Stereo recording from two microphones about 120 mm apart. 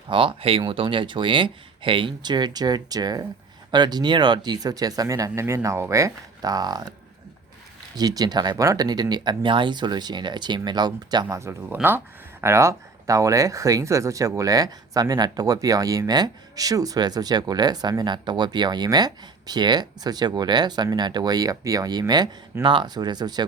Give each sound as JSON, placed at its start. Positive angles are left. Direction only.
{"t": 0.1, "sound": "speech", "side_deg": -45}
{"t": 7.9, "sound": "speech", "side_deg": -35}